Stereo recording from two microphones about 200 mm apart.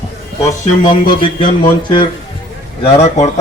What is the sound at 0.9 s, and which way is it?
A man's voice, 25° left (ahead or behind).